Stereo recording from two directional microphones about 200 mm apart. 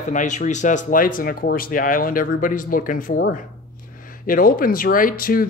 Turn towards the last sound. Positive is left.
turn(degrees=45)  # may be behind; listen again after turning